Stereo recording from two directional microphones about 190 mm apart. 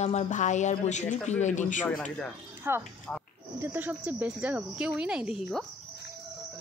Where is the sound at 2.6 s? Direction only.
10° right (ahead or behind).